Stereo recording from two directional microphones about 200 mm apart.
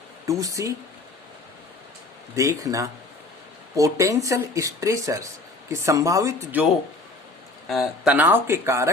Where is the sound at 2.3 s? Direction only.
15° right (ahead or behind).